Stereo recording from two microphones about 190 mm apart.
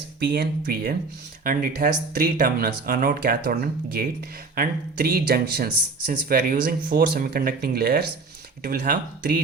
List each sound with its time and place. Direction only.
0.2 s speech: 55° right (ahead or behind)